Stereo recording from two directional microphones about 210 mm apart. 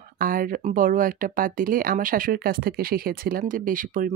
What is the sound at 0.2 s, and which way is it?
Speech, 40° right (ahead or behind).